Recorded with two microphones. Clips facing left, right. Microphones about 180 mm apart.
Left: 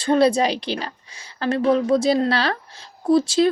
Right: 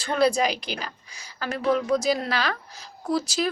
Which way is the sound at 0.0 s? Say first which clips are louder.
Left 5 dB; 25° left (ahead or behind).